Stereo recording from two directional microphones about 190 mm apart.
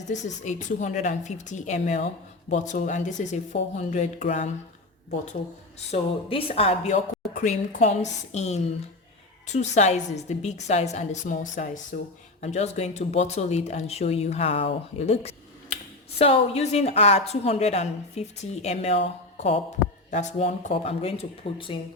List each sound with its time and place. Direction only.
0.1 s speech: 40° left (ahead or behind)
5.9 s speech: 30° left (ahead or behind)
20.1 s speech: 40° left (ahead or behind)